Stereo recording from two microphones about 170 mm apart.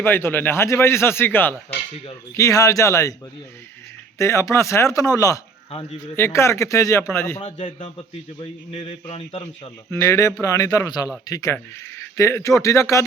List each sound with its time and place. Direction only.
0.0 s a man's voice: 10° left (ahead or behind)
4.2 s a man's voice: 20° left (ahead or behind)
8.4 s a man's voice: 35° left (ahead or behind)
9.9 s a man's voice: 15° left (ahead or behind)